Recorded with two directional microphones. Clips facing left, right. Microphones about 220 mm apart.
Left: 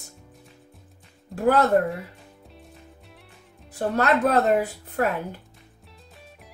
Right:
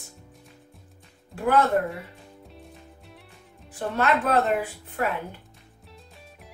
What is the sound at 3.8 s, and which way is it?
Speech, 40° left (ahead or behind).